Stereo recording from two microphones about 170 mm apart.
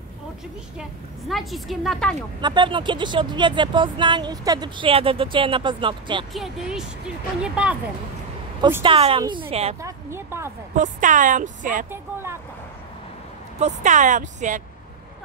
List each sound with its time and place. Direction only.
1.3 s a woman's voice: centre (ahead or behind)
2.4 s speech: 25° right (ahead or behind)
6.3 s a woman's voice: centre (ahead or behind)
8.8 s a woman's voice: 35° right (ahead or behind)
9.8 s a woman's voice: 15° right (ahead or behind)
10.8 s speech: 50° right (ahead or behind)
11.9 s vehicle: 15° right (ahead or behind)
13.6 s speech: 40° right (ahead or behind)